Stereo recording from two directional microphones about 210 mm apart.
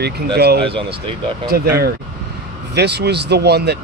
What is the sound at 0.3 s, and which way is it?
Speech, 50° right (ahead or behind).